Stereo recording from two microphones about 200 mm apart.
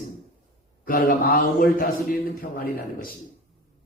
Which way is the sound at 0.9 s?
45° left (ahead or behind).